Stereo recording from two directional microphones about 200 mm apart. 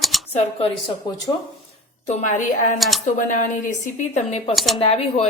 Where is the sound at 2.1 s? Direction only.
35° left (ahead or behind).